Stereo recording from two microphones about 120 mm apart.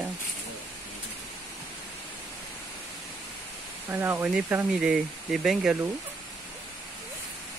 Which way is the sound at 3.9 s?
15° right (ahead or behind).